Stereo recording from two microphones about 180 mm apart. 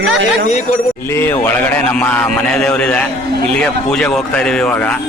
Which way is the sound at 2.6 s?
5° left (ahead or behind).